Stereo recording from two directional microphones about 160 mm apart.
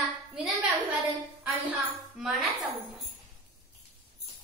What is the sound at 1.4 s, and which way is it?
A woman's voice, 10° right (ahead or behind).